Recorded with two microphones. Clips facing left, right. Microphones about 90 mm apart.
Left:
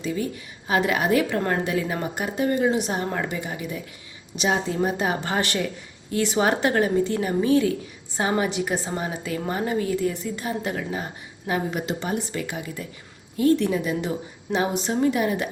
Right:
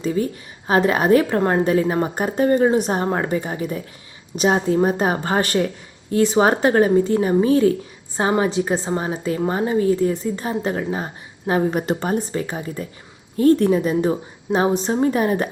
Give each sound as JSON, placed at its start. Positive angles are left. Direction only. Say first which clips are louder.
{"t": 0.7, "sound": "a woman's voice", "louder": "right 6 dB", "side_deg": -40}
{"t": 12.3, "sound": "a woman's voice", "louder": "right 5 dB", "side_deg": -35}